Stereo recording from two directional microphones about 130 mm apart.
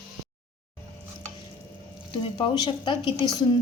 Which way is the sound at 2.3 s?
35° left (ahead or behind).